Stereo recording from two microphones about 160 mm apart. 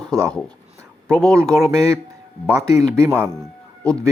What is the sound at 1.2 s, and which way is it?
Speech, 20° right (ahead or behind).